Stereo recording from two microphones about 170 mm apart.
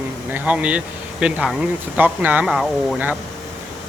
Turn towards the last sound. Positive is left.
turn(degrees=-5)  # may be behind; listen again after turning